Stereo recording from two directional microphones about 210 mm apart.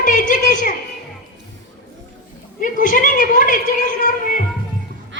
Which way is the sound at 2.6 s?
40° left (ahead or behind).